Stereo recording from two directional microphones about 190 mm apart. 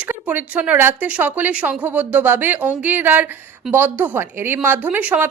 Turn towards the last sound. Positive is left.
turn(degrees=-10)  # may be behind; listen again after turning